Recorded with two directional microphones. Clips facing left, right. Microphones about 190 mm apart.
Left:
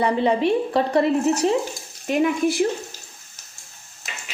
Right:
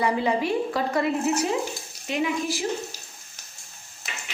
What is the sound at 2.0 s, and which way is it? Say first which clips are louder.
Speech: left 6 dB; 50° left (ahead or behind).